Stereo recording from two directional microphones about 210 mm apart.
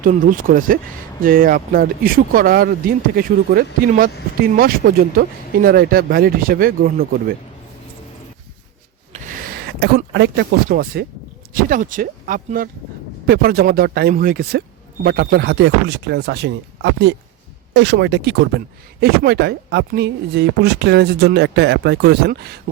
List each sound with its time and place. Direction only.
0.0 s speech: 40° right (ahead or behind)
9.1 s a sound: 40° right (ahead or behind)
10.7 s speech: 45° right (ahead or behind)